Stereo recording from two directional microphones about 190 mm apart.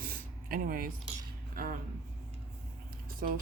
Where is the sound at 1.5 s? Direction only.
45° right (ahead or behind).